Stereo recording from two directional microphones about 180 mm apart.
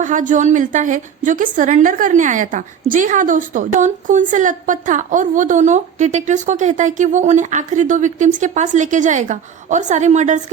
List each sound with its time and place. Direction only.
0.0 s a woman's voice: 45° right (ahead or behind)